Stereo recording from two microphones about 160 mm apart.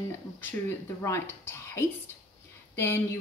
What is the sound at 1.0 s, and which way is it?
Speech, 15° left (ahead or behind).